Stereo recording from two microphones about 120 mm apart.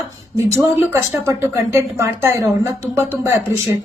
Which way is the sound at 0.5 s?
20° right (ahead or behind).